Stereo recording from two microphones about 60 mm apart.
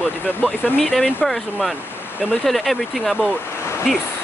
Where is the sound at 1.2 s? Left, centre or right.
Centre.